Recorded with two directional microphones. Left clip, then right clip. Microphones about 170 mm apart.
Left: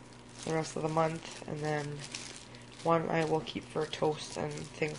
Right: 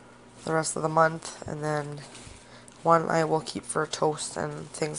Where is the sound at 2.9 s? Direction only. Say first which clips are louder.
Right 7 dB; 20° right (ahead or behind).